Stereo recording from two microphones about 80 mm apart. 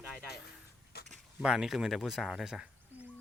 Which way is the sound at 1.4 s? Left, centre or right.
Centre.